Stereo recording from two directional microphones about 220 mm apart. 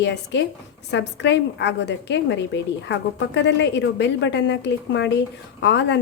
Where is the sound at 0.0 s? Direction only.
55° left (ahead or behind).